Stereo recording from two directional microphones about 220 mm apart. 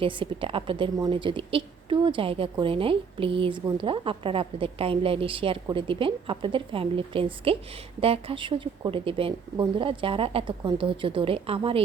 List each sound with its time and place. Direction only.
0.0 s a woman's voice: 25° right (ahead or behind)